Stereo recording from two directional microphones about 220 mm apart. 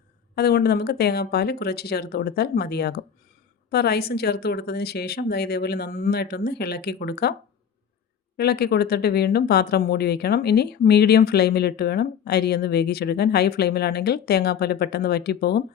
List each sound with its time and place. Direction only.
0.3 s speech: 45° left (ahead or behind)
8.4 s speech: 45° left (ahead or behind)